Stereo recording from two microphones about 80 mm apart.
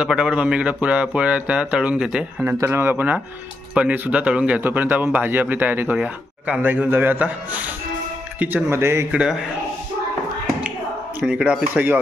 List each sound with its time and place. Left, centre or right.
0.0 s speech: centre
2.6 s speech: right
8.6 s speech: right
9.1 s speech: centre
11.2 s speech: centre